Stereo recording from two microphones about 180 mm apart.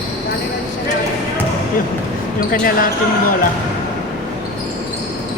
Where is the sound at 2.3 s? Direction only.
50° left (ahead or behind).